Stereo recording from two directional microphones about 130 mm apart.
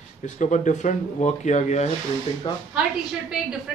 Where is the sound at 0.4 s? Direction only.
70° left (ahead or behind).